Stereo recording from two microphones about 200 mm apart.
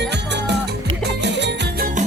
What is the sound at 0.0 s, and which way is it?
Music, 60° right (ahead or behind).